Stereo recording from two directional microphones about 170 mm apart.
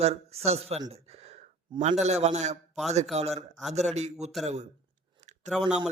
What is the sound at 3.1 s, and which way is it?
Speech, 40° right (ahead or behind).